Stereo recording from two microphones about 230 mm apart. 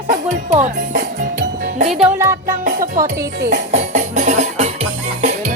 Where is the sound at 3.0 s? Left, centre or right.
Right.